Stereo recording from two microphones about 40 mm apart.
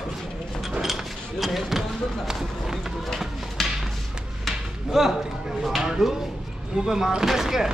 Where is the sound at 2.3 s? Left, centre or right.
Centre.